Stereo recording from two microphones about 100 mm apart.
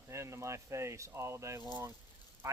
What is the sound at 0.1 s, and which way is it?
Speech, 30° right (ahead or behind).